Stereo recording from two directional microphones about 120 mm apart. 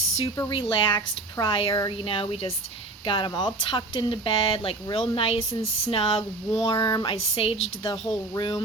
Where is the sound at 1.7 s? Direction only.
30° left (ahead or behind).